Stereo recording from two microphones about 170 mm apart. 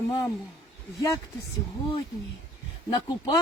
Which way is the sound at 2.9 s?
25° left (ahead or behind).